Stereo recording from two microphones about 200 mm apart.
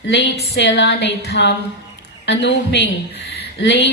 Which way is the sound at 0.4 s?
55° left (ahead or behind).